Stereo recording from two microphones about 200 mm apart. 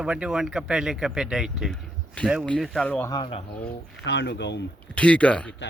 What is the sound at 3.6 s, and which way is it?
Speech, 60° left (ahead or behind).